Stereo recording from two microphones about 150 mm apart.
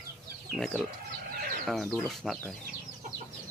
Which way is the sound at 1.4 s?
70° right (ahead or behind).